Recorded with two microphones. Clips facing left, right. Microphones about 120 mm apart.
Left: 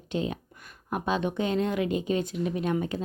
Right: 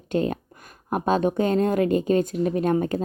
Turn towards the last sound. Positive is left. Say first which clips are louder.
# right 6 dB
turn(degrees=-45)  # may be behind; listen again after turning